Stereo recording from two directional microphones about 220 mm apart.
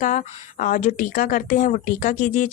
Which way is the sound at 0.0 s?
35° left (ahead or behind).